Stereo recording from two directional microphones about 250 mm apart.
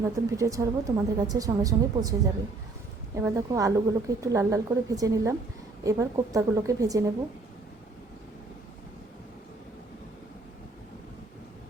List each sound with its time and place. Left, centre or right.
0.3 s a woman's voice: centre